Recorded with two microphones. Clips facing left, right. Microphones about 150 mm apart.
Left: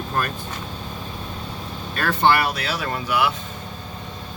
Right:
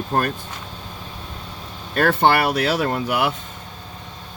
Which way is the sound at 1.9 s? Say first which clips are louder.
Right 3 dB; 55° right (ahead or behind).